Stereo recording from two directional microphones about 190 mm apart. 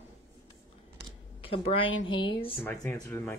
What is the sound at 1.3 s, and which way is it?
Speech, 30° left (ahead or behind).